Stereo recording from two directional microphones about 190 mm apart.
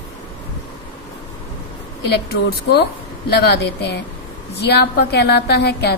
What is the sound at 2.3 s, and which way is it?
A woman's voice, 60° left (ahead or behind).